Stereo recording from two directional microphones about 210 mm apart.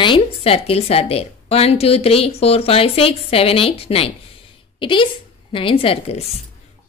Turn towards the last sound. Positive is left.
turn(degrees=25)  # may be behind; listen again after turning